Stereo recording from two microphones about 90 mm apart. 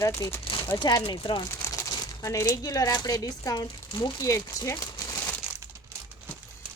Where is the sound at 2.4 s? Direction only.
40° left (ahead or behind).